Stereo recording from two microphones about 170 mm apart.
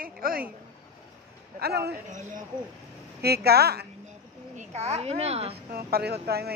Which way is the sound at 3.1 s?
70° right (ahead or behind).